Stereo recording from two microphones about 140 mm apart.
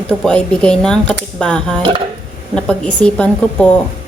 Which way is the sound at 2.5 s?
5° left (ahead or behind).